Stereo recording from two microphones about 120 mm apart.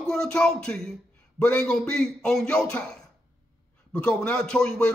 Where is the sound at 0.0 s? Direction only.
5° left (ahead or behind).